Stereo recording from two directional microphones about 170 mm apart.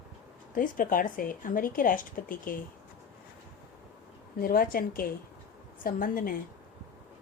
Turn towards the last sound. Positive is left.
turn(degrees=55)  # may be behind; listen again after turning